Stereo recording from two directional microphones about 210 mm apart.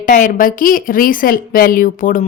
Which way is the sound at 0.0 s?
40° left (ahead or behind).